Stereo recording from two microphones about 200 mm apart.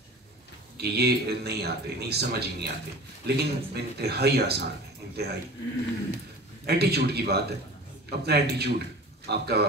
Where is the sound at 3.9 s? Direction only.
55° right (ahead or behind).